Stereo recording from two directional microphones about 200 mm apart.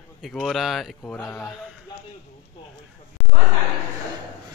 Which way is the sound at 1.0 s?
15° left (ahead or behind).